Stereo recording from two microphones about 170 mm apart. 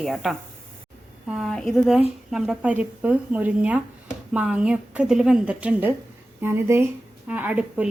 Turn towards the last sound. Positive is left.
turn(degrees=-5)  # may be behind; listen again after turning